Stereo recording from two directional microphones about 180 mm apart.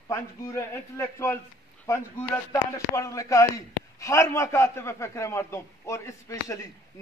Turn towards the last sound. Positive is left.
turn(degrees=15)  # may be behind; listen again after turning